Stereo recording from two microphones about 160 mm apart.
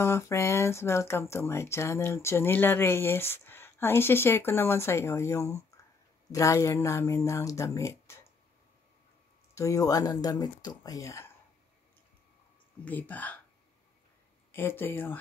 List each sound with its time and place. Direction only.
0.0 s speech: 15° left (ahead or behind)
9.6 s speech: 20° left (ahead or behind)
12.8 s speech: 10° left (ahead or behind)
14.5 s speech: 15° left (ahead or behind)